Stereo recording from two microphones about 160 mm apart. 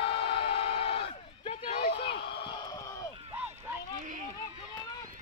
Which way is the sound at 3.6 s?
55° right (ahead or behind).